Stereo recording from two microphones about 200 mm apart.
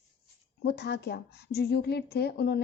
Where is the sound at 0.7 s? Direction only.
55° left (ahead or behind).